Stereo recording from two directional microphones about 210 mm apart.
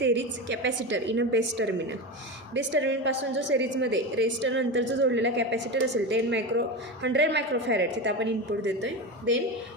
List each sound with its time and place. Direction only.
0.0 s a woman's voice: 60° right (ahead or behind)